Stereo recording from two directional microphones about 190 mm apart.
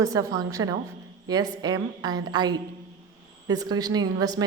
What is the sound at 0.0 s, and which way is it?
A woman's voice, 20° right (ahead or behind).